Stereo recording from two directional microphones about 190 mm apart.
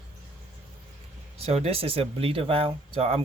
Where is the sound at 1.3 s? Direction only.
30° right (ahead or behind).